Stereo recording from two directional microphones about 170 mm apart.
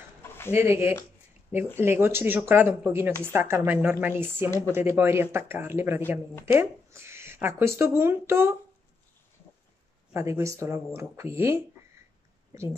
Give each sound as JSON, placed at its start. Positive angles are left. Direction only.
{"t": 0.6, "sound": "speech", "side_deg": -15}
{"t": 10.1, "sound": "speech", "side_deg": -15}